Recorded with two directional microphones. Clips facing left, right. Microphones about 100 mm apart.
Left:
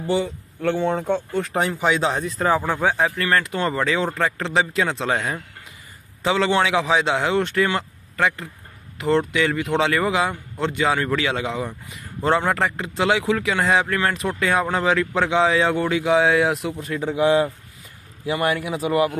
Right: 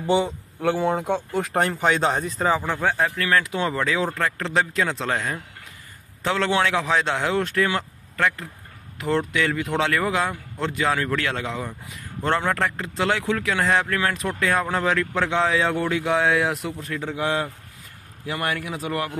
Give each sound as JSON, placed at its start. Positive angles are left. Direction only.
{"t": 0.0, "sound": "speech", "side_deg": -20}
{"t": 0.6, "sound": "a man's voice", "side_deg": -10}